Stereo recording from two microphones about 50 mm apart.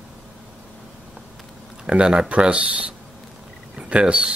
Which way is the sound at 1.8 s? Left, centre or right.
Right.